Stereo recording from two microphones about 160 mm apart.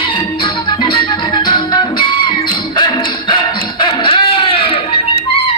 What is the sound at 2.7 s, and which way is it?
Dog, 30° left (ahead or behind).